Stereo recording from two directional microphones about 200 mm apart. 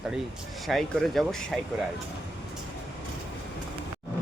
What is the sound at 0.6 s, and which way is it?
Speech, centre (ahead or behind).